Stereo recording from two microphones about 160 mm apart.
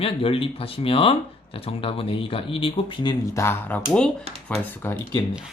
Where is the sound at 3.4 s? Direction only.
15° left (ahead or behind).